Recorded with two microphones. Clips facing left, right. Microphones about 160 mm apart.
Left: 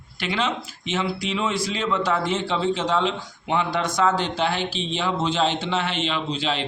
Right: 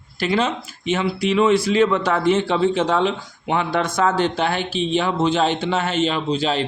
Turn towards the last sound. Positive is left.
turn(degrees=-40)  # may be behind; listen again after turning